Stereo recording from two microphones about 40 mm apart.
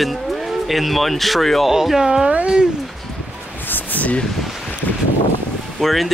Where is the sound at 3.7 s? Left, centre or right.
Left.